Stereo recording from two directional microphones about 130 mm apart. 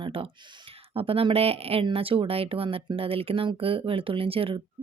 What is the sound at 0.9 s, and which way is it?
Speech, 45° right (ahead or behind).